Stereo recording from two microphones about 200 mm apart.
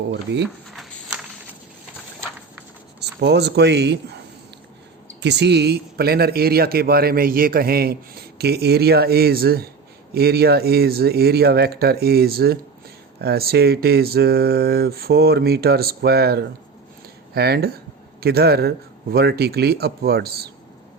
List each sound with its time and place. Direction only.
0.7 s a sound: centre (ahead or behind)
3.0 s speech: 55° right (ahead or behind)
5.2 s speech: 60° right (ahead or behind)